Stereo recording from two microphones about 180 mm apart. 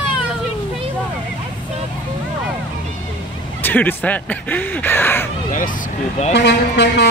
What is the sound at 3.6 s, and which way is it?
Speech, 10° left (ahead or behind).